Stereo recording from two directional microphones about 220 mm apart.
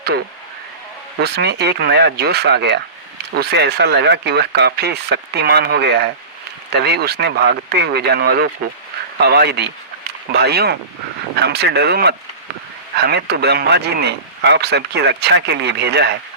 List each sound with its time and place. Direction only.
1.2 s speech: 50° right (ahead or behind)